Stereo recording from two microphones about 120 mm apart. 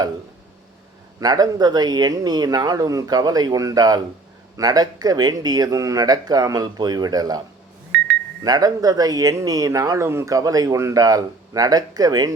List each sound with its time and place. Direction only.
1.2 s speech: 30° right (ahead or behind)
8.4 s speech: 30° right (ahead or behind)